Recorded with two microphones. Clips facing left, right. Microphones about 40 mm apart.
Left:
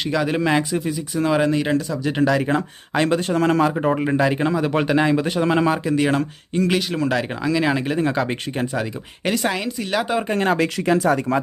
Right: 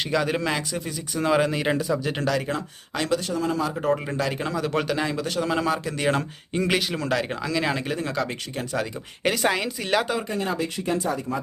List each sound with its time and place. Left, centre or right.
0.1 s speech: centre
1.1 s speech: centre
2.5 s speech: left
3.3 s speech: left
3.8 s speech: left
6.0 s speech: centre
7.9 s speech: left
9.2 s speech: centre
10.2 s speech: left
10.6 s speech: left